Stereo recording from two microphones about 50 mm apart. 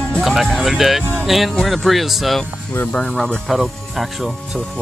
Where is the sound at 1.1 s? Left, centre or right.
Centre.